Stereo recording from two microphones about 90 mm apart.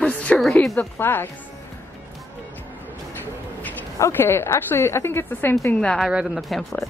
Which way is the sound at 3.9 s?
30° left (ahead or behind).